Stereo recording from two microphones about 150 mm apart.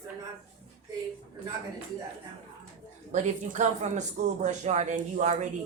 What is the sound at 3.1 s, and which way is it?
A man's voice, 55° right (ahead or behind).